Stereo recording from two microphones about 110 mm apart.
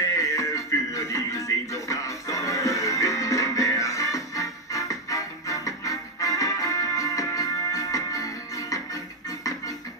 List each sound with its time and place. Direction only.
0.0 s music: 30° left (ahead or behind)